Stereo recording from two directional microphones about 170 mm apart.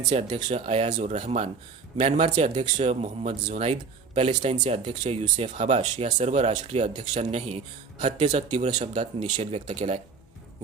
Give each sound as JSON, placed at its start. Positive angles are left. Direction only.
{"t": 0.1, "sound": "speech", "side_deg": -40}